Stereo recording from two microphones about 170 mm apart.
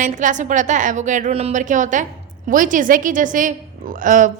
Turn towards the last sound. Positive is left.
turn(degrees=-50)  # may be behind; listen again after turning